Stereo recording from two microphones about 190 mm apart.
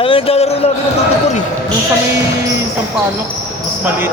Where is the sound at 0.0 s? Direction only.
30° left (ahead or behind).